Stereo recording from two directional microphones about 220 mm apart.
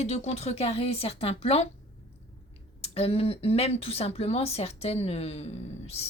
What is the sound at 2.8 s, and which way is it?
A woman's voice, 25° left (ahead or behind).